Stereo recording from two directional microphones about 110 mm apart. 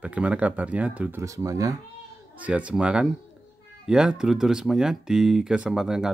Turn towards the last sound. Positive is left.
turn(degrees=-5)  # may be behind; listen again after turning